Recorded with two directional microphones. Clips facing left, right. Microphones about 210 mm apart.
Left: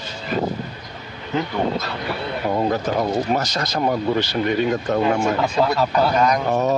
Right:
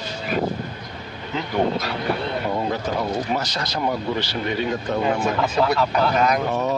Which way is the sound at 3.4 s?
45° left (ahead or behind).